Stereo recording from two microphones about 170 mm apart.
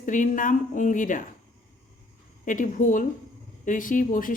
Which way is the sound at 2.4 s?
50° left (ahead or behind).